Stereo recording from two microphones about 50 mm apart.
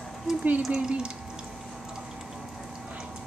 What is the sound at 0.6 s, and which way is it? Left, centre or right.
Speech, centre.